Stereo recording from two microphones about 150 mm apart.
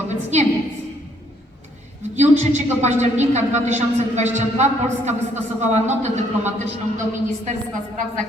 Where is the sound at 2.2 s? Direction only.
50° right (ahead or behind).